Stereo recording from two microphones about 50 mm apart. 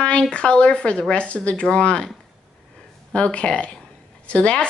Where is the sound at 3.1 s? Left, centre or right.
Left.